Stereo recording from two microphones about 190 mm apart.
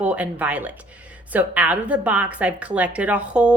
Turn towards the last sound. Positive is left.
turn(degrees=-5)  # may be behind; listen again after turning